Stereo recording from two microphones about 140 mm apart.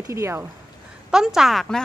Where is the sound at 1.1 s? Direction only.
5° right (ahead or behind).